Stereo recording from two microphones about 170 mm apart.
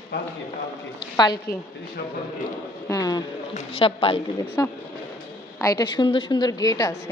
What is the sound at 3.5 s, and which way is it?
Speech, 30° left (ahead or behind).